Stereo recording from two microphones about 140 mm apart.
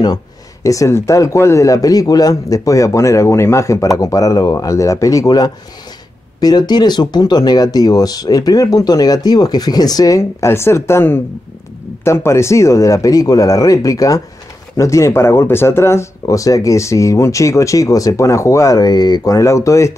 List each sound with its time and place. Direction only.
0.7 s speech: 20° left (ahead or behind)